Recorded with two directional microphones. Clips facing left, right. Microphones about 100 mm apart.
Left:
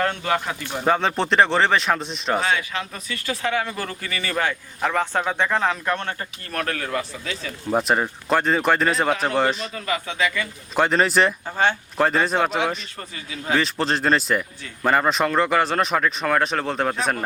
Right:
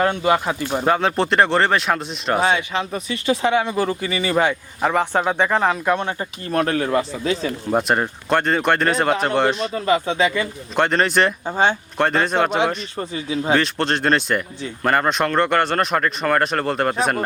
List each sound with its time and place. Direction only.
0.0 s speech: 15° right (ahead or behind)
0.9 s speech: centre (ahead or behind)
2.4 s speech: 25° right (ahead or behind)
7.7 s speech: centre (ahead or behind)
9.7 s speech: 30° right (ahead or behind)
10.8 s speech: centre (ahead or behind)
11.4 s speech: 20° right (ahead or behind)
11.9 s speech: 5° left (ahead or behind)
13.0 s speech: 25° right (ahead or behind)
13.6 s speech: centre (ahead or behind)